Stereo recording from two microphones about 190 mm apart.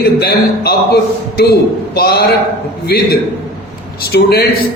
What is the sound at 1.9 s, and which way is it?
A man's voice, 55° left (ahead or behind).